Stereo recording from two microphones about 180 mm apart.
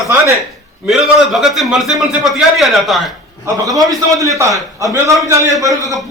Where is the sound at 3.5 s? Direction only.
20° right (ahead or behind).